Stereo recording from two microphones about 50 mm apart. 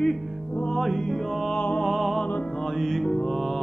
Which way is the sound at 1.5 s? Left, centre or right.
Left.